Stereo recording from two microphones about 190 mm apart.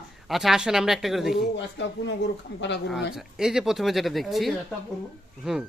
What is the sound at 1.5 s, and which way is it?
Speech, 65° left (ahead or behind).